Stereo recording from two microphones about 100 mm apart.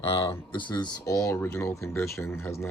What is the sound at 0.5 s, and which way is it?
Speech, 45° left (ahead or behind).